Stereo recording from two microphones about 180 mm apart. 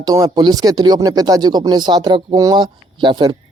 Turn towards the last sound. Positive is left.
turn(degrees=-25)  # may be behind; listen again after turning